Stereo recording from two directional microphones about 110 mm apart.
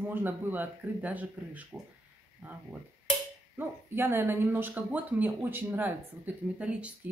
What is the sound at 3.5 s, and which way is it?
Speech, 20° right (ahead or behind).